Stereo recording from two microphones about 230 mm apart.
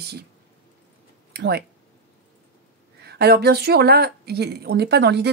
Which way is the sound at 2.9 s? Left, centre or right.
Right.